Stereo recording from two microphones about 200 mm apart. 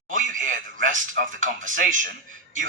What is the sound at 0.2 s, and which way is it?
Speech, 40° right (ahead or behind).